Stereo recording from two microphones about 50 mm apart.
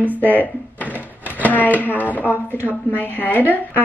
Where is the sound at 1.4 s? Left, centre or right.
Left.